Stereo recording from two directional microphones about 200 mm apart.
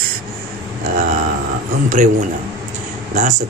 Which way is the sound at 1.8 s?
40° right (ahead or behind).